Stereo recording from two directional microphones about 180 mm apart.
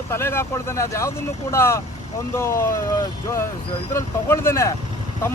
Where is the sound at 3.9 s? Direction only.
15° left (ahead or behind).